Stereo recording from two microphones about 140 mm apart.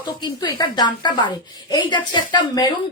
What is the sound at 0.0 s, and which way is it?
A woman's voice, 30° left (ahead or behind).